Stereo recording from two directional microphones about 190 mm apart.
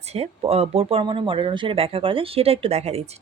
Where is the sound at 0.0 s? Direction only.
35° right (ahead or behind).